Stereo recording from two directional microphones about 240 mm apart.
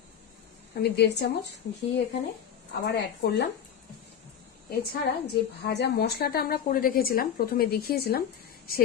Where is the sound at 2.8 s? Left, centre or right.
Left.